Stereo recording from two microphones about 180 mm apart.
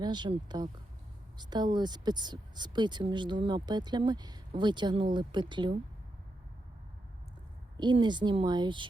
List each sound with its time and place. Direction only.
0.0 s speech: 25° right (ahead or behind)
7.8 s speech: 25° right (ahead or behind)